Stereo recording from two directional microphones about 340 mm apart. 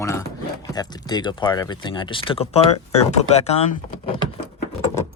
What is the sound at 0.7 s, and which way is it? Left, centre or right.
Speech, centre.